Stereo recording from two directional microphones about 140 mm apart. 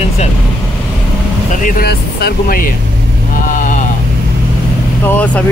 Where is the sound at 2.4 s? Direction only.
90° left.